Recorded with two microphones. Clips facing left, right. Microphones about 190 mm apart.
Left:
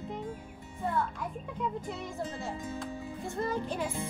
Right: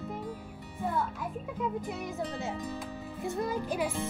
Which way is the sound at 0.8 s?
5° right (ahead or behind).